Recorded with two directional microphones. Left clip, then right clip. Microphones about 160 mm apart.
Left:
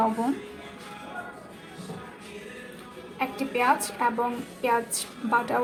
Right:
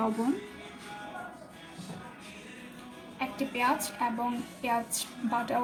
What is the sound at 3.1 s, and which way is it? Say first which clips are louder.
Speech: left 6 dB; 15° left (ahead or behind).